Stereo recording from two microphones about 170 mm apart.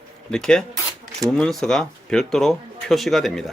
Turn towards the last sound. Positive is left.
turn(degrees=0)  # may be behind; listen again after turning